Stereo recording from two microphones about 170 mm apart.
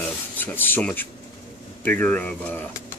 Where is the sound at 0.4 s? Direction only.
10° left (ahead or behind).